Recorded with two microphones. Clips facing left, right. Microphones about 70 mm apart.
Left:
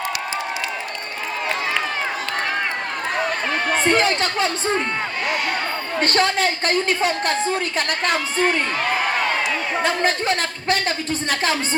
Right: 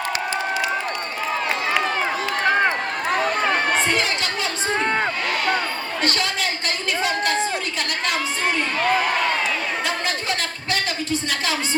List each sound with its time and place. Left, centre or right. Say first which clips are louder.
3.8 s speech: left 4 dB; left
6.0 s a woman's voice: left 6 dB; left
9.8 s a woman's voice: left 5 dB; left